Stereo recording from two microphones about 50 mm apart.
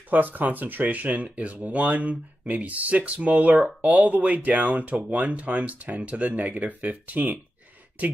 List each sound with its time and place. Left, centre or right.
0.1 s speech: right